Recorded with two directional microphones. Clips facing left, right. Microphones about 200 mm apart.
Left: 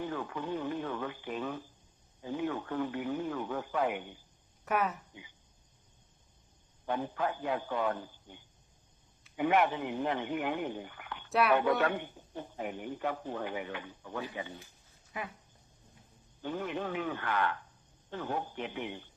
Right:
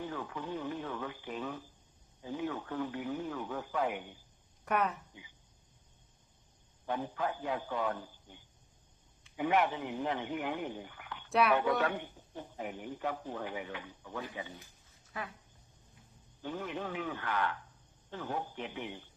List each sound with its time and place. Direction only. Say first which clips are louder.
0.0 s a man's voice: left 3 dB; 60° left (ahead or behind)
4.6 s speech: left 1 dB; 5° left (ahead or behind)
6.8 s a man's voice: left 2 dB; 60° left (ahead or behind)
9.4 s a man's voice: left 2 dB; 60° left (ahead or behind)
11.3 s speech: left 1 dB; centre (ahead or behind)
11.8 s a man's voice: left 2 dB; 60° left (ahead or behind)
15.1 s speech: left 2 dB; 15° left (ahead or behind)
16.4 s a man's voice: left 3 dB; 60° left (ahead or behind)